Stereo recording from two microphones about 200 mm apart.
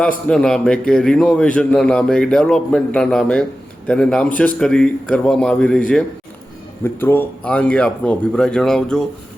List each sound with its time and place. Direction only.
0.3 s speech: 5° left (ahead or behind)